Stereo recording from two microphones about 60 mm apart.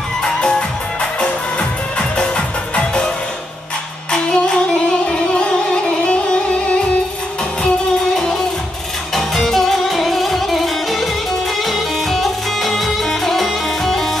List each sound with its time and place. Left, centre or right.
0.2 s music: centre
4.1 s music: centre
8.1 s music: centre